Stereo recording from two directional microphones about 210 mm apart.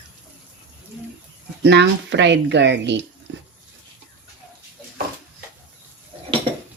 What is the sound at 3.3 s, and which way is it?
Water, 60° right (ahead or behind).